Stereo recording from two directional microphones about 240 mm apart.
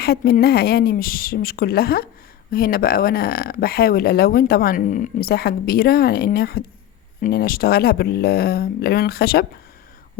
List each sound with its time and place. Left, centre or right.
0.0 s speech: left